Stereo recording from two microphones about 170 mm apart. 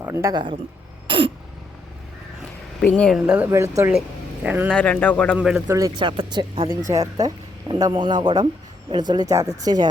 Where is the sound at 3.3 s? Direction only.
15° right (ahead or behind).